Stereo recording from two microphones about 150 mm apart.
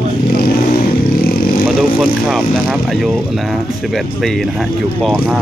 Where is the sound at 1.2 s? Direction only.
75° left (ahead or behind).